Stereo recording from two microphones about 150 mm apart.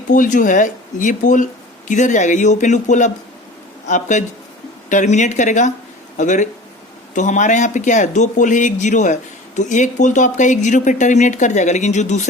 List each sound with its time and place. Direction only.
0.1 s speech: 60° left (ahead or behind)